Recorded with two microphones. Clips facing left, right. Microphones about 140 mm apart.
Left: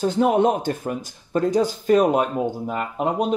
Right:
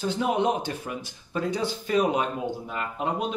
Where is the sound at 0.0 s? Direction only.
45° left (ahead or behind).